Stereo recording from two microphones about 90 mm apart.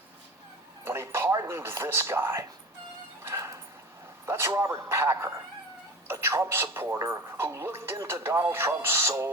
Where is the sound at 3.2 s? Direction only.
35° right (ahead or behind).